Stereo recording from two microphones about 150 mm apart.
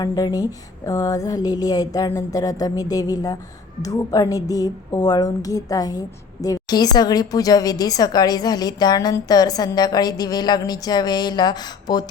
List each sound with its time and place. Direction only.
0.0 s speech: 25° left (ahead or behind)